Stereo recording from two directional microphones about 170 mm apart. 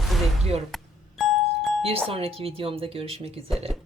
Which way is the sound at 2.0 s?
35° right (ahead or behind).